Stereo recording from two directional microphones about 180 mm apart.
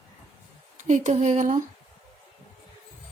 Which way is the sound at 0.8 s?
40° right (ahead or behind).